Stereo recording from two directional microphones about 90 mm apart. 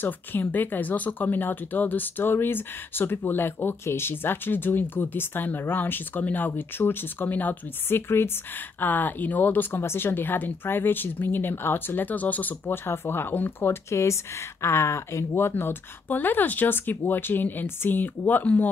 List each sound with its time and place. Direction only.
0.0 s speech: 20° left (ahead or behind)